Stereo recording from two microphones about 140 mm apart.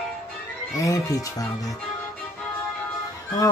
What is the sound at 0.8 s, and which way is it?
Speech, 25° left (ahead or behind).